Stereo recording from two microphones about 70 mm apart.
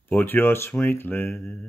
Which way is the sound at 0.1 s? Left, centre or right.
Left.